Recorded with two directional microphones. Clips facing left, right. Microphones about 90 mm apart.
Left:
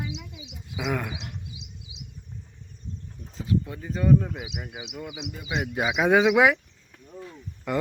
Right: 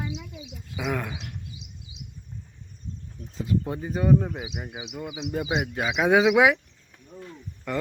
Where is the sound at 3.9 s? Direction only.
15° right (ahead or behind).